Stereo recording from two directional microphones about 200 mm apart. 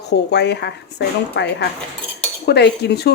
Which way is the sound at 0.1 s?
55° left (ahead or behind).